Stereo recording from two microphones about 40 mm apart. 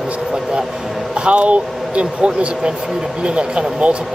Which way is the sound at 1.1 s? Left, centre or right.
Right.